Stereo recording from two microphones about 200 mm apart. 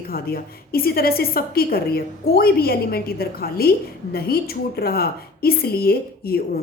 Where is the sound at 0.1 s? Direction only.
50° left (ahead or behind).